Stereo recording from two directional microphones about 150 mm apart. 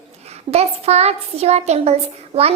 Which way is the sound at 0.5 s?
45° right (ahead or behind).